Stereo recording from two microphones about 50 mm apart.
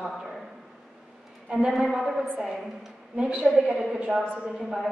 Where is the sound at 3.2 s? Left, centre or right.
Right.